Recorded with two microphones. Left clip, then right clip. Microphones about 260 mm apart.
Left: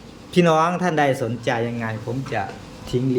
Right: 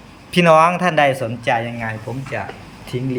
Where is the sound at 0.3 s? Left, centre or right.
Centre.